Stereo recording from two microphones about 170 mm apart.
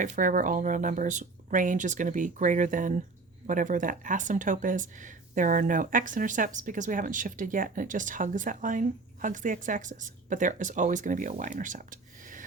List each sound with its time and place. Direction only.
0.0 s speech: 50° right (ahead or behind)